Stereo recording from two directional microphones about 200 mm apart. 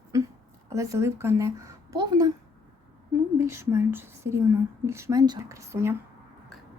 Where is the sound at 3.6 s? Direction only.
10° right (ahead or behind).